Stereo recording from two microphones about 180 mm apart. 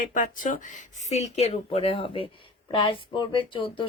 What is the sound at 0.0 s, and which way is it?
Speech, 45° left (ahead or behind).